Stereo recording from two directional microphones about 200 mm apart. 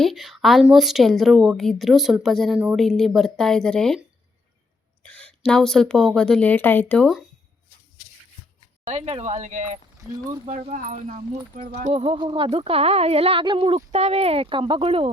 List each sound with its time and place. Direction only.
0.0 s speech: centre (ahead or behind)
5.0 s speech: 5° left (ahead or behind)
8.9 s speech: 35° right (ahead or behind)